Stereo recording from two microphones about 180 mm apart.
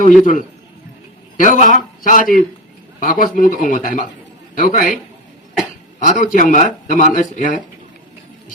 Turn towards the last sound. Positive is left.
turn(degrees=45)  # may be behind; listen again after turning